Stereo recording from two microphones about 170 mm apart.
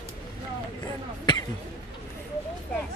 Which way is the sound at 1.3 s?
25° left (ahead or behind).